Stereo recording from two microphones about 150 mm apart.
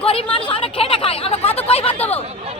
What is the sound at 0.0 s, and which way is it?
Chatter, 40° left (ahead or behind).